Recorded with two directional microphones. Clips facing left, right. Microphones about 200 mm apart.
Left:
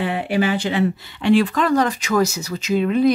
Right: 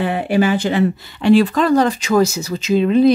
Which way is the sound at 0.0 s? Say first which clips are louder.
Right 4 dB; 45° right (ahead or behind).